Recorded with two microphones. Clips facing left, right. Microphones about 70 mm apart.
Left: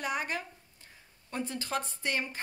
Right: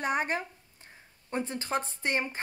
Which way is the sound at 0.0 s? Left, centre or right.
Right.